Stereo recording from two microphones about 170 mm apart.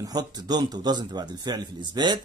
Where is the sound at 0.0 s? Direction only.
25° right (ahead or behind).